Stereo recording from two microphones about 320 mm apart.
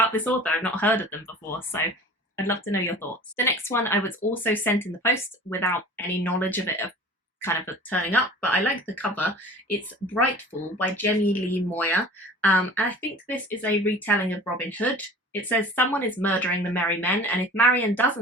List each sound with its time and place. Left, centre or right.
0.0 s speech: centre